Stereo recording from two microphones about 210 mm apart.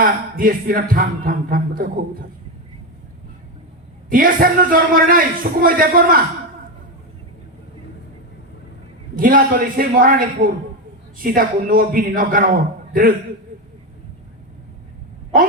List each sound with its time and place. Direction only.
0.0 s a man's voice: 40° right (ahead or behind)
4.1 s a man's voice: 40° right (ahead or behind)
9.1 s a man's voice: 40° right (ahead or behind)